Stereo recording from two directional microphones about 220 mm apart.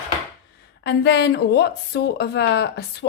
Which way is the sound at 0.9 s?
50° left (ahead or behind).